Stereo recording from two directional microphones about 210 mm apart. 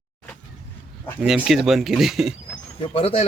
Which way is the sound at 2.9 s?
25° left (ahead or behind).